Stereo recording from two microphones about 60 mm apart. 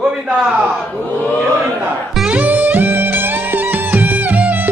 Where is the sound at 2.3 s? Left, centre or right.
Right.